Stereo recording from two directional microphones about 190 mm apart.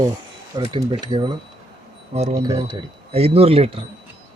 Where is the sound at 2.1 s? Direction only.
35° right (ahead or behind).